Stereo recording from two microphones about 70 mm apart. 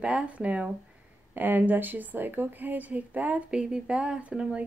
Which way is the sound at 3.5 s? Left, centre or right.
Centre.